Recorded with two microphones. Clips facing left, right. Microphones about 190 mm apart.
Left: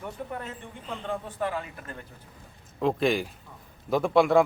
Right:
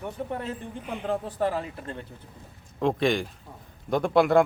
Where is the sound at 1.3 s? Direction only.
35° right (ahead or behind).